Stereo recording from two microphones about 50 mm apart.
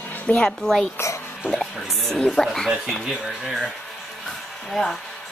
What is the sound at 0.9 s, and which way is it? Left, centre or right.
Speech, left.